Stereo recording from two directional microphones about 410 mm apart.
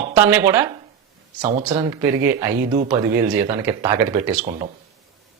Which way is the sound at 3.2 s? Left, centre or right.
Centre.